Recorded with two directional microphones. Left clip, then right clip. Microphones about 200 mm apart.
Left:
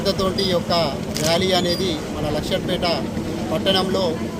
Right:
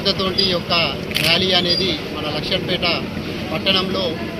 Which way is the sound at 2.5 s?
15° left (ahead or behind).